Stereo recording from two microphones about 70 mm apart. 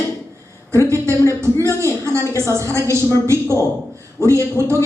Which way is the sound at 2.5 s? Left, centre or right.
Right.